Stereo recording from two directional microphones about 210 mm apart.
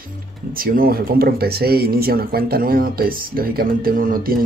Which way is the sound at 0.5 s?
45° right (ahead or behind).